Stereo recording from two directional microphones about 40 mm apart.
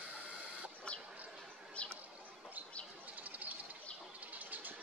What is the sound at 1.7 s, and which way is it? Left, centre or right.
Bird, left.